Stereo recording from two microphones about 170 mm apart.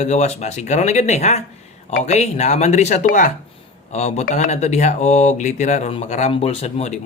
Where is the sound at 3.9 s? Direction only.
40° left (ahead or behind).